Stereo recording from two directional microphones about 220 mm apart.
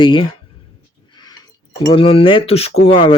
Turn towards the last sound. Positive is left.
turn(degrees=25)  # may be behind; listen again after turning